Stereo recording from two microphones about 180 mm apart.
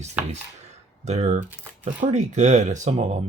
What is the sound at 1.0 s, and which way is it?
Speech, 35° right (ahead or behind).